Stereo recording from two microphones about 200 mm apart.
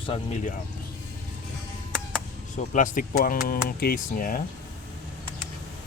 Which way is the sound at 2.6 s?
40° left (ahead or behind).